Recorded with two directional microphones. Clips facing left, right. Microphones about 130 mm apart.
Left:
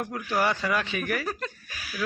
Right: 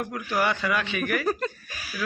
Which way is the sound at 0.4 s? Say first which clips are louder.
Right 1 dB; 35° left (ahead or behind).